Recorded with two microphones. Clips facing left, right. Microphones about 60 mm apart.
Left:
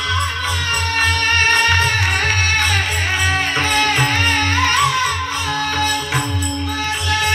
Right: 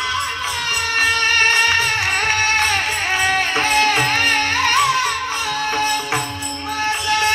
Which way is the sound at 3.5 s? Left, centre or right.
Centre.